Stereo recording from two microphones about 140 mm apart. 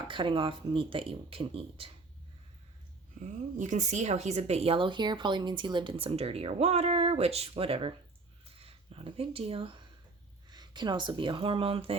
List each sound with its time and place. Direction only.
0.1 s speech: 35° right (ahead or behind)
3.2 s speech: 60° right (ahead or behind); by 7.9 s 40° right (ahead or behind)
8.4 s a sound: 45° right (ahead or behind)
10.5 s speech: 30° right (ahead or behind)